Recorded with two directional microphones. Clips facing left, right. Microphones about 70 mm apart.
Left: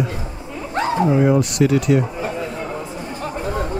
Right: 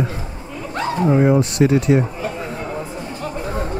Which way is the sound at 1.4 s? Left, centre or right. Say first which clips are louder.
Right 1 dB; right.